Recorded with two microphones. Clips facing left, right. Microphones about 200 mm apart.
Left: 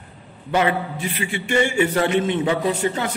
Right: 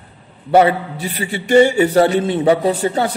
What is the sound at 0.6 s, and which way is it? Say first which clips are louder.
A man's voice: right 7 dB; 35° right (ahead or behind).